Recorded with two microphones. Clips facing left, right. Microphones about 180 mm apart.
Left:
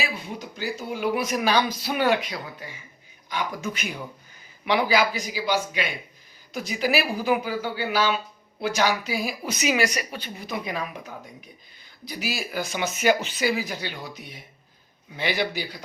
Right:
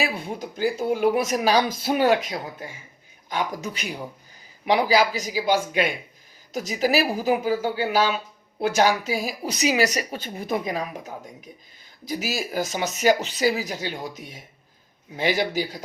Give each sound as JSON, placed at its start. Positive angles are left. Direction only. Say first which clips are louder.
{"t": 0.0, "sound": "a woman's voice", "louder": "right 4 dB", "side_deg": -50}